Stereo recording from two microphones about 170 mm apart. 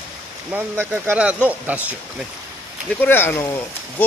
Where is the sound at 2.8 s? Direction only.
10° left (ahead or behind).